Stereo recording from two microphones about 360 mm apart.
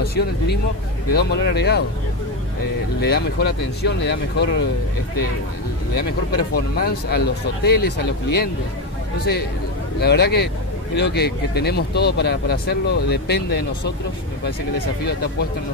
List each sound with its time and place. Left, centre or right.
0.0 s speech: left
3.0 s speech: left
5.9 s speech: left
9.9 s speech: left